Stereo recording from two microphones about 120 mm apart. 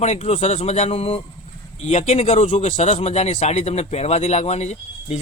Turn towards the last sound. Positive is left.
turn(degrees=70)  # may be behind; listen again after turning